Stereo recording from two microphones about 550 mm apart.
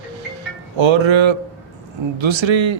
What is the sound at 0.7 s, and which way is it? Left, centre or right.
A man's voice, right.